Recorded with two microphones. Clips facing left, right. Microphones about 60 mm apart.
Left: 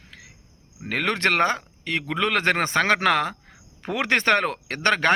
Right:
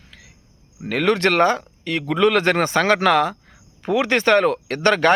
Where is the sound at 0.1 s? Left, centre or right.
Left.